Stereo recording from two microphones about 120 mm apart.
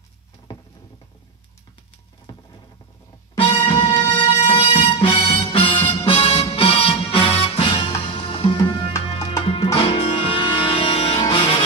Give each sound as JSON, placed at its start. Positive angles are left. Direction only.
{"t": 2.3, "sound": "a sound", "side_deg": 40}
{"t": 3.6, "sound": "music", "side_deg": 45}
{"t": 11.1, "sound": "music", "side_deg": 35}